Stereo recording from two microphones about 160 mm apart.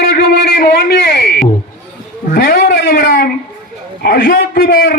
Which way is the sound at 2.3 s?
75° left (ahead or behind).